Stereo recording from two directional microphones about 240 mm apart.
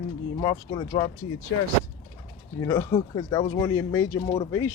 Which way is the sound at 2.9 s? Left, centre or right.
Left.